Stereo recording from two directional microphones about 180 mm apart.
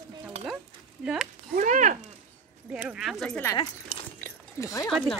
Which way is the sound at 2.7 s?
5° right (ahead or behind).